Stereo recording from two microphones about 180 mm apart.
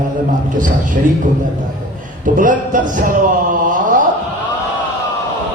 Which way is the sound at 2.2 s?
45° right (ahead or behind).